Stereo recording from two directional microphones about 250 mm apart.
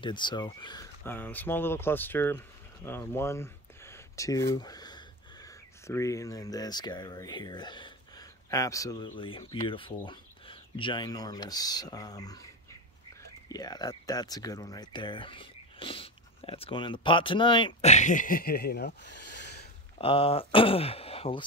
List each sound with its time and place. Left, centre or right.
0.0 s speech: centre
13.5 s speech: centre; by 18.9 s left
19.1 s a sound: left
20.0 s speech: left